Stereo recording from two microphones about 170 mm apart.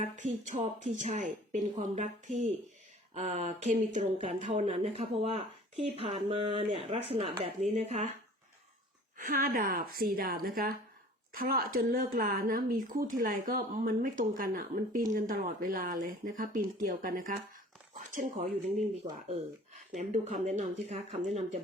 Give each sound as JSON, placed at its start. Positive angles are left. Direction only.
{"t": 0.0, "sound": "a woman's voice", "side_deg": -45}
{"t": 9.1, "sound": "a woman's voice", "side_deg": -50}
{"t": 20.0, "sound": "speech", "side_deg": -45}